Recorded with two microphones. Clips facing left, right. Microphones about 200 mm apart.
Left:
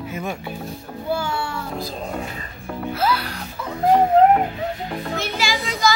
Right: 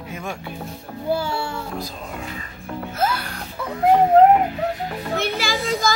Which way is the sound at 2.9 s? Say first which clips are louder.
Left 2 dB; 45° right (ahead or behind).